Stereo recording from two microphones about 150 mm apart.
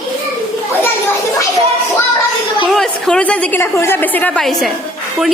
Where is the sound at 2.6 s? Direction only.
5° left (ahead or behind).